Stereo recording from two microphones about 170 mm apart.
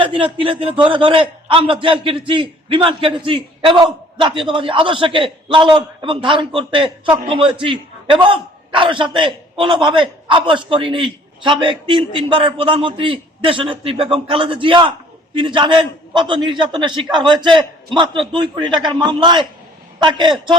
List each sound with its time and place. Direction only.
0.0 s a man's voice: 30° right (ahead or behind)